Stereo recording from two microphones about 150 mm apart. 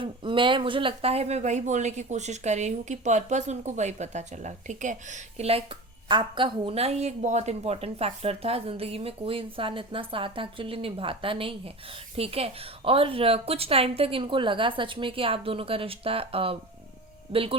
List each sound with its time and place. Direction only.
0.0 s speech: 35° right (ahead or behind)
6.1 s a woman's voice: 30° right (ahead or behind)